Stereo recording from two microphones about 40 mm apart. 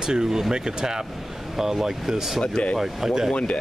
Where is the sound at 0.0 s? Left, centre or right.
Centre.